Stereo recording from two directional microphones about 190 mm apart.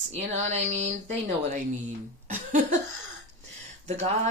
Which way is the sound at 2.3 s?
45° right (ahead or behind).